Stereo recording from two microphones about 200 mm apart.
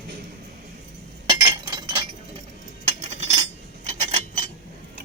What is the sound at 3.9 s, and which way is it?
Cutlery, 35° right (ahead or behind).